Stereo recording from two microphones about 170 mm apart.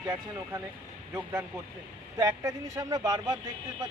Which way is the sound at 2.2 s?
20° right (ahead or behind).